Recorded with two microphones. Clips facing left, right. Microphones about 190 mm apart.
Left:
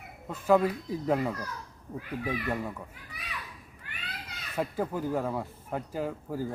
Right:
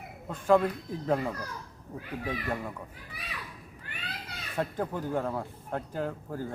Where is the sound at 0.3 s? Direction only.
5° left (ahead or behind).